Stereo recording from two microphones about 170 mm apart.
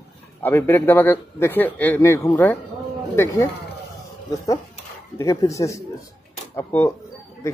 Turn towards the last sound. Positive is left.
turn(degrees=15)  # may be behind; listen again after turning